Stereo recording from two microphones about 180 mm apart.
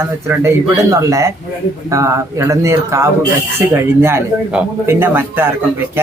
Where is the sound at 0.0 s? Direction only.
15° right (ahead or behind).